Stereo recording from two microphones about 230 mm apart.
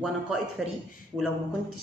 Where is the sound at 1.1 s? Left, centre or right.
Centre.